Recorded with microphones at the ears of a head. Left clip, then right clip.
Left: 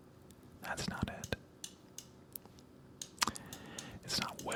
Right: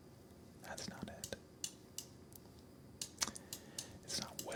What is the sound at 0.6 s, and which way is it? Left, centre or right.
Whispering, left.